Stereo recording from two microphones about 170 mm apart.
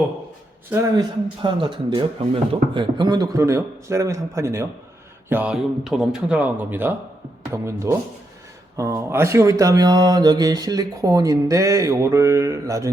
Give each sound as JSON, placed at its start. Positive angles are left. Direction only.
{"t": 0.7, "sound": "speech", "side_deg": -15}
{"t": 1.4, "sound": "speech", "side_deg": -30}